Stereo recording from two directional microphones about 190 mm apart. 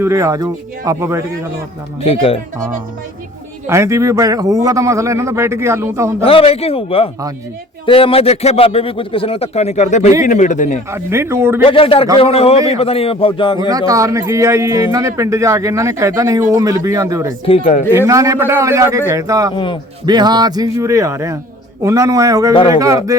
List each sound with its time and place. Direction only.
0.0 s a man's voice: 15° right (ahead or behind)
2.0 s speech: 30° left (ahead or behind)
3.7 s a man's voice: 15° right (ahead or behind)
6.2 s a man's voice: 30° left (ahead or behind)
10.9 s a man's voice: 15° right (ahead or behind)
11.6 s a man's voice: 30° left (ahead or behind)
13.6 s a man's voice: 20° right (ahead or behind)
17.4 s speech: 30° left (ahead or behind)
17.9 s a man's voice: 15° right (ahead or behind)
19.5 s a man's voice: 25° left (ahead or behind)
20.1 s a man's voice: 20° right (ahead or behind)